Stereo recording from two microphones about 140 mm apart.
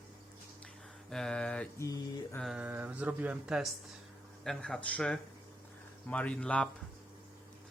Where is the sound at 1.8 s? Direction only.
20° left (ahead or behind).